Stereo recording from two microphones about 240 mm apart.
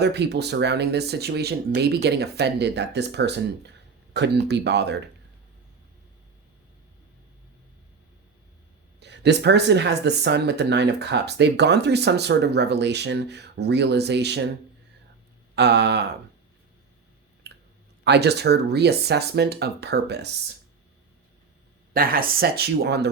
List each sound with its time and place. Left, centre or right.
0.0 s speech: right
9.0 s speech: right
15.5 s speech: right
17.5 s clicking: right
18.0 s speech: right
21.9 s speech: right